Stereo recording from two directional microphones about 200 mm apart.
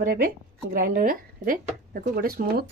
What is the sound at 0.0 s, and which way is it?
Speech, 45° right (ahead or behind).